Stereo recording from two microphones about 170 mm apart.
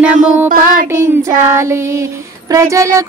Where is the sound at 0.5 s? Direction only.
50° right (ahead or behind).